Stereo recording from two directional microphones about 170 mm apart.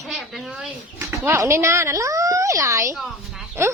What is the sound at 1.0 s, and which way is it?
A woman's voice, 15° right (ahead or behind).